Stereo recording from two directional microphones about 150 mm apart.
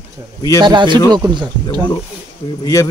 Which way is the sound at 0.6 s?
30° right (ahead or behind).